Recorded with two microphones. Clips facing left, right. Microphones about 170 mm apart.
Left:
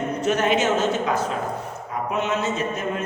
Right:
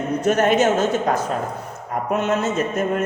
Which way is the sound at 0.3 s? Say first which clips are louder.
Right 4 dB; 45° right (ahead or behind).